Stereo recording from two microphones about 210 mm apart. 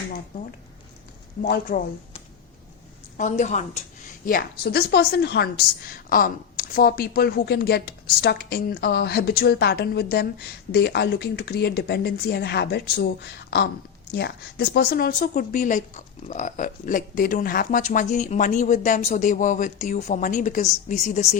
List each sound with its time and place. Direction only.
1.4 s a woman's voice: 40° left (ahead or behind)
4.3 s a woman's voice: 45° left (ahead or behind)